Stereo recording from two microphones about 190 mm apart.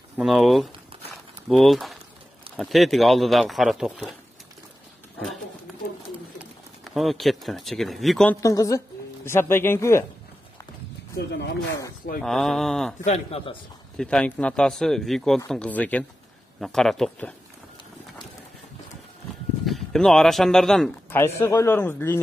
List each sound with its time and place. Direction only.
0.2 s speech: centre (ahead or behind)
6.3 s speech: centre (ahead or behind)
8.4 s a woman's voice: 15° left (ahead or behind)
11.2 s speech: 60° left (ahead or behind)
12.2 s speech: centre (ahead or behind)
13.0 s a man's voice: 35° left (ahead or behind)
13.9 s speech: 5° left (ahead or behind)
19.6 s speech: centre (ahead or behind)
21.1 s a woman's voice: 15° left (ahead or behind)